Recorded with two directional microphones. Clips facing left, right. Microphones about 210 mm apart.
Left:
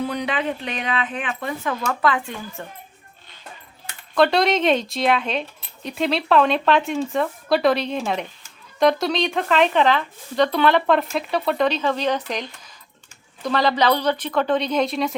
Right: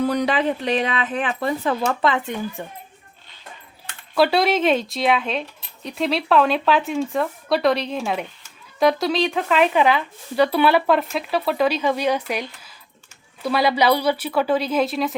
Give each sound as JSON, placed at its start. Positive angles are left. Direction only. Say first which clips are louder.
{"t": 0.1, "sound": "speech", "louder": "right 4 dB", "side_deg": -40}
{"t": 4.1, "sound": "a woman's voice", "louder": "even", "side_deg": -5}